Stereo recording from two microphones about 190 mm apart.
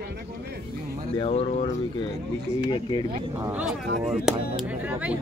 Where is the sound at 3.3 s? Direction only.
15° right (ahead or behind).